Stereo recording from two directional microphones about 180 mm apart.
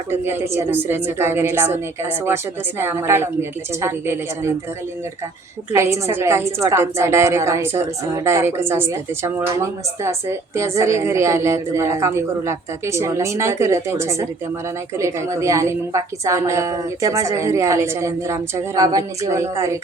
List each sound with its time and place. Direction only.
0.1 s a woman's voice: 15° right (ahead or behind)
5.7 s a woman's voice: 15° right (ahead or behind)